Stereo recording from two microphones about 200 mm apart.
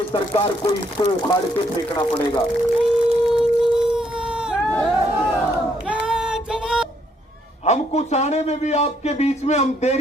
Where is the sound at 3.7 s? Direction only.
5° right (ahead or behind).